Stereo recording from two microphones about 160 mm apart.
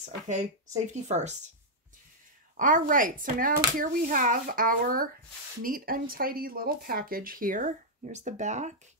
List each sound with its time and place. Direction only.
1.0 s speech: 45° right (ahead or behind)
2.5 s speech: 55° right (ahead or behind)